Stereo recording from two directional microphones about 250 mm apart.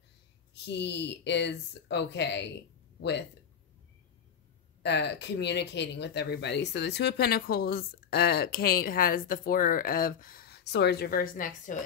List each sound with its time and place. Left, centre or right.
0.7 s speech: left
4.8 s speech: left